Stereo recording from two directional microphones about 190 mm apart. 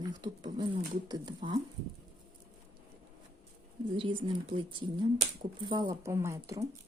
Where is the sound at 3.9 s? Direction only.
25° right (ahead or behind).